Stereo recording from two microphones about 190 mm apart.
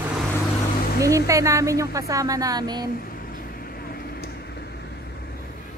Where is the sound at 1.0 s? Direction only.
15° right (ahead or behind).